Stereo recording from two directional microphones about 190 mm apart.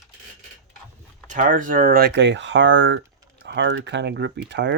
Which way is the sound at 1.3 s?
45° right (ahead or behind).